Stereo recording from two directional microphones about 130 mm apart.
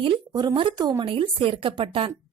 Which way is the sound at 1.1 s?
45° right (ahead or behind).